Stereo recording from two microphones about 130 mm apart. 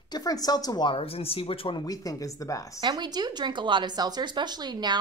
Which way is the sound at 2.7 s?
35° right (ahead or behind).